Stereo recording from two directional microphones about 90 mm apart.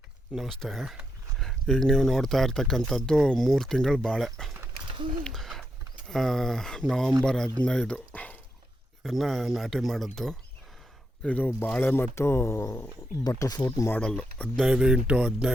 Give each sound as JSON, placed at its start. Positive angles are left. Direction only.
{"t": 0.3, "sound": "speech", "side_deg": 0}
{"t": 5.2, "sound": "owl", "side_deg": 5}
{"t": 6.1, "sound": "speech", "side_deg": 5}
{"t": 9.0, "sound": "speech", "side_deg": 0}
{"t": 11.2, "sound": "speech", "side_deg": 15}
{"t": 12.1, "sound": "speech", "side_deg": 30}
{"t": 14.0, "sound": "speech", "side_deg": 10}
{"t": 14.6, "sound": "speech", "side_deg": -5}